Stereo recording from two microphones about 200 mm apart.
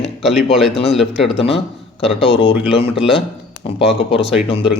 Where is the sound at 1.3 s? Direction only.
30° left (ahead or behind).